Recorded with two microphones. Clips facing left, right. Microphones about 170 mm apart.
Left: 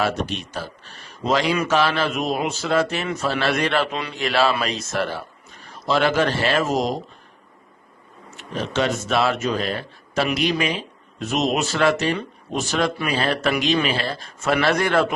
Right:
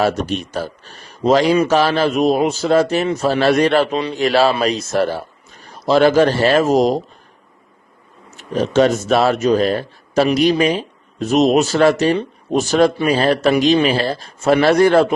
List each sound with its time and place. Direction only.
0.0 s speech: 40° right (ahead or behind)
8.4 s speech: 40° right (ahead or behind)